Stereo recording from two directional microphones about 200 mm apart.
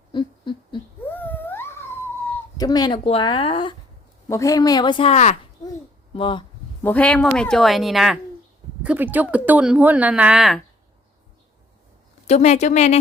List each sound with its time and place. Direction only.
0.1 s a sound: 25° left (ahead or behind)
1.1 s a sound: 10° left (ahead or behind)
2.6 s speech: 20° left (ahead or behind)
4.3 s speech: 15° left (ahead or behind)
6.8 s a woman's voice: 5° left (ahead or behind)
12.3 s a woman's voice: 35° left (ahead or behind)